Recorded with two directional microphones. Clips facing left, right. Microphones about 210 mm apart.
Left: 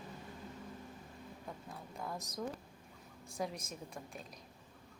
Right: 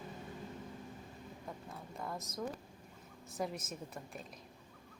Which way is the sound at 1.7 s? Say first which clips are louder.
Even; centre (ahead or behind).